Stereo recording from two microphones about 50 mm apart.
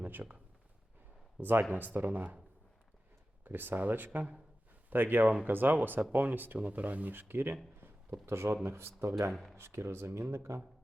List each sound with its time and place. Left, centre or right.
0.0 s speech: right
1.4 s speech: right
3.4 s speech: right
6.6 s speech: right
8.3 s speech: right
9.0 s speech: right
9.3 s speech: centre
9.6 s speech: right